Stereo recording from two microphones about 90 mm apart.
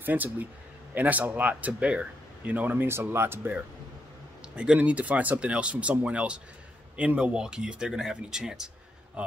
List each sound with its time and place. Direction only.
0.0 s speech: 20° right (ahead or behind)
4.6 s speech: 15° right (ahead or behind)